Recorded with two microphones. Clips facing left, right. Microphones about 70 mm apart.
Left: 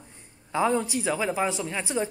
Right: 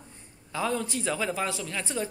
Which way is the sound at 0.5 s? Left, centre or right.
Left.